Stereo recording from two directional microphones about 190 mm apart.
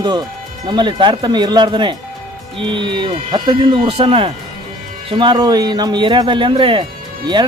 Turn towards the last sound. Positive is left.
turn(degrees=-25)  # may be behind; listen again after turning